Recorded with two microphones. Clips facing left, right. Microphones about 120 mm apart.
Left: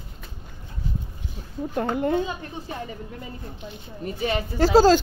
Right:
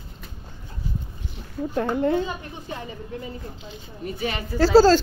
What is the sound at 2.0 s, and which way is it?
Speech, 25° left (ahead or behind).